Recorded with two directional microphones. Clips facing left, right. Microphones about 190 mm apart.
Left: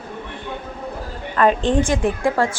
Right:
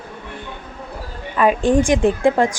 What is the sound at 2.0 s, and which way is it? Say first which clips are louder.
Speech: right 4 dB; 25° right (ahead or behind).